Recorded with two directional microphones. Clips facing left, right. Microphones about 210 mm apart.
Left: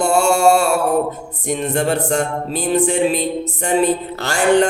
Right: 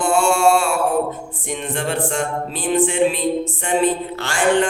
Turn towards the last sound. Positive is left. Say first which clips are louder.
# left 2 dB
turn(degrees=40)  # may be behind; listen again after turning